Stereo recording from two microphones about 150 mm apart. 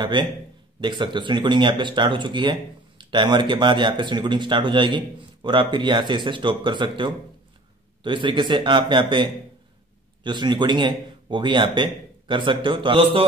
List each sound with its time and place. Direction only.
0.0 s a man's voice: 30° right (ahead or behind)